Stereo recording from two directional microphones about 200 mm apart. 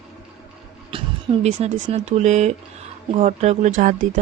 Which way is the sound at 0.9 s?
30° right (ahead or behind).